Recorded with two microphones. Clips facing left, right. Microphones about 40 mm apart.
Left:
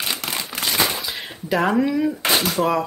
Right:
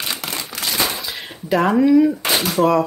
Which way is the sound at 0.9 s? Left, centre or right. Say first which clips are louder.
Even; centre.